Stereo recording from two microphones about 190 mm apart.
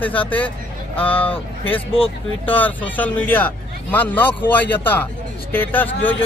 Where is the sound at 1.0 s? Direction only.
30° left (ahead or behind).